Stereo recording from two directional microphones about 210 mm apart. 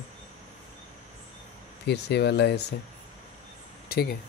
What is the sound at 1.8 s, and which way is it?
Speech, 55° left (ahead or behind).